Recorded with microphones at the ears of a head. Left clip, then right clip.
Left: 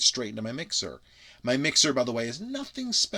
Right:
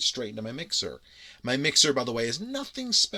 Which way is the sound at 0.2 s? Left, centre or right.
Centre.